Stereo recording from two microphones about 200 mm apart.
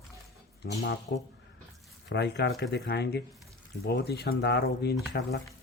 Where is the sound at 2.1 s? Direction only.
60° left (ahead or behind).